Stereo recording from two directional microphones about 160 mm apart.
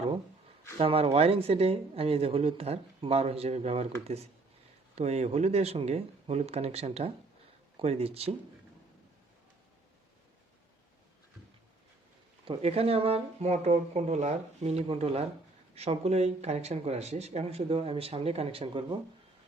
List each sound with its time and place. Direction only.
0.8 s speech: 35° right (ahead or behind)
12.5 s speech: 40° right (ahead or behind)